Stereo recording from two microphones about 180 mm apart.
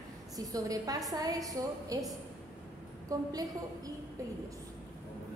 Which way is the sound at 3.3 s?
20° right (ahead or behind).